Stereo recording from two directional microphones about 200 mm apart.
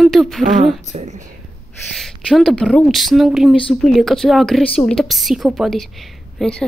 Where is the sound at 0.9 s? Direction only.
35° right (ahead or behind).